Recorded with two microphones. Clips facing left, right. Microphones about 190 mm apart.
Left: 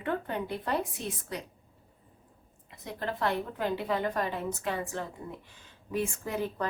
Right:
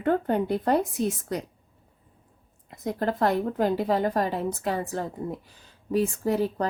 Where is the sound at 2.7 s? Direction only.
40° right (ahead or behind).